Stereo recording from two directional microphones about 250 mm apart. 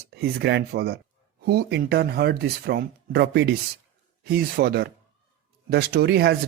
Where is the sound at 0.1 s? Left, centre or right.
Right.